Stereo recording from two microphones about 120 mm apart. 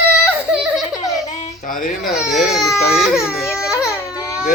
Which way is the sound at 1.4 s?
90° left.